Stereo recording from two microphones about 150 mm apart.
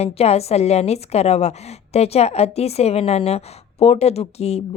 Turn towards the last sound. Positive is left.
turn(degrees=45)  # may be behind; listen again after turning